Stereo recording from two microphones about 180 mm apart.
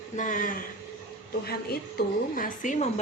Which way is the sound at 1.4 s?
60° left (ahead or behind).